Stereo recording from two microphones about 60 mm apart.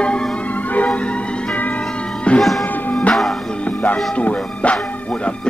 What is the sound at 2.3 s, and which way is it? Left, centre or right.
Music, centre.